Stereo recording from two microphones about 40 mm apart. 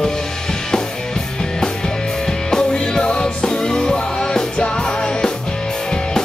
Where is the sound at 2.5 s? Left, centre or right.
Centre.